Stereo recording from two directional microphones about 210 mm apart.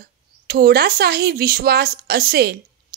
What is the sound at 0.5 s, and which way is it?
Speech, 50° right (ahead or behind).